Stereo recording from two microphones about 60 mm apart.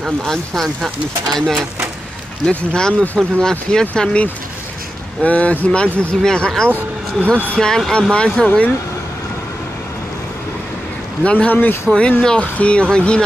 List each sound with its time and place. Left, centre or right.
0.2 s speech: centre
2.5 s speech: centre
6.2 s speech: centre; by 8.7 s left
11.2 s speech: left
11.9 s speech: centre